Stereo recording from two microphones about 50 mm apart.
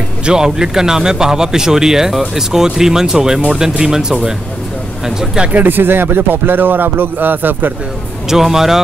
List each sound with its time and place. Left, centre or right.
0.2 s a man's voice: centre
5.5 s speech: right
8.3 s a man's voice: centre